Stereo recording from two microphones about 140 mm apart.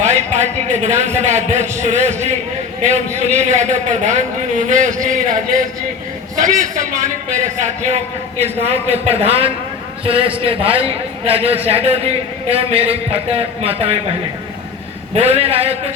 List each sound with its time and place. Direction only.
0.0 s a man's voice: 55° right (ahead or behind)
7.3 s a man's voice: 60° right (ahead or behind)
8.6 s a man's voice: 45° right (ahead or behind)
15.1 s a man's voice: 45° right (ahead or behind)